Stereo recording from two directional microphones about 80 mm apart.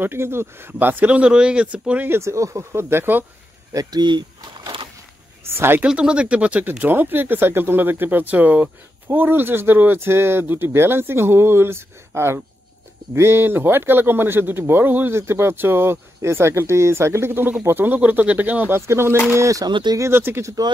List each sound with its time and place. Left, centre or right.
0.0 s speech: right
2.0 s speech: right
3.7 s speech: right
5.5 s speech: right
5.8 s speech: centre
18.8 s speech: right
19.7 s speech: right
20.0 s speech: right